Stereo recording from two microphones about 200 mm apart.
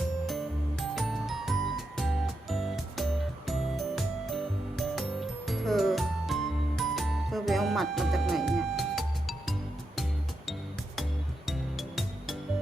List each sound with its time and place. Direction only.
0.3 s music: centre (ahead or behind)